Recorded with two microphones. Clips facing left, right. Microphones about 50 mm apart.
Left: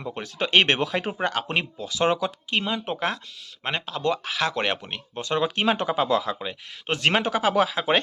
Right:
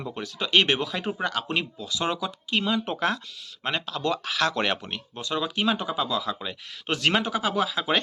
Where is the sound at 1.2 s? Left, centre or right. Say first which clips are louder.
Left 2 dB; left.